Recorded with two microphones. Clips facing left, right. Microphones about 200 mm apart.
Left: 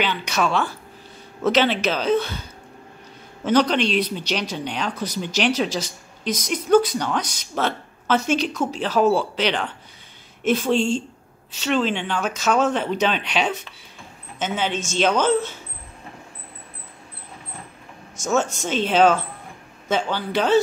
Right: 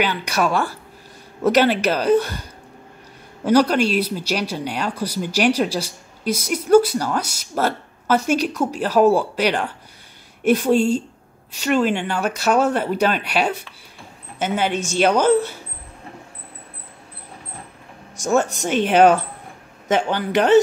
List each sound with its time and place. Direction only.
0.0 s speech: 10° right (ahead or behind)
3.4 s speech: 10° right (ahead or behind)
18.2 s speech: 15° right (ahead or behind)